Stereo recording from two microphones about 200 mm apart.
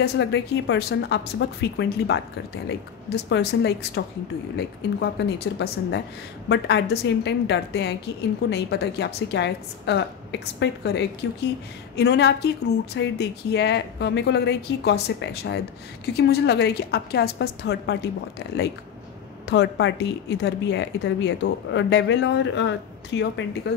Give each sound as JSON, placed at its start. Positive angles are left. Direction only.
{"t": 0.0, "sound": "speech", "side_deg": 60}
{"t": 19.4, "sound": "speech", "side_deg": 60}